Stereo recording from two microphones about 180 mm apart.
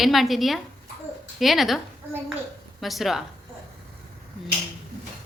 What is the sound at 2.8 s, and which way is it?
Speech, centre (ahead or behind).